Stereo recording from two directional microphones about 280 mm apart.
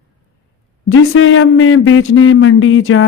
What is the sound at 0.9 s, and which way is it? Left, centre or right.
Mantra, left.